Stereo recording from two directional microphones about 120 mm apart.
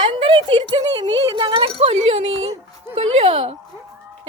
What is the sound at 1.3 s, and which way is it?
Speech, 45° right (ahead or behind).